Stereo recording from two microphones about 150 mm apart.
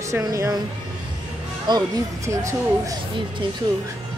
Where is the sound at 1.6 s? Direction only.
25° right (ahead or behind).